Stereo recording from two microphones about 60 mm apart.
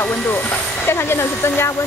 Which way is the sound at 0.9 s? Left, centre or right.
Left.